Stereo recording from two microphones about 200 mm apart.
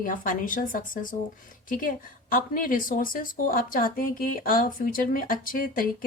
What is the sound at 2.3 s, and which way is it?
A woman's voice, 45° left (ahead or behind).